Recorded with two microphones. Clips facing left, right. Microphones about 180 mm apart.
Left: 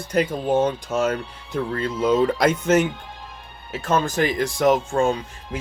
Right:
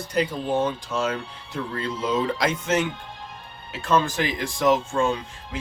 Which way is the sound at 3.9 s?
45° left (ahead or behind).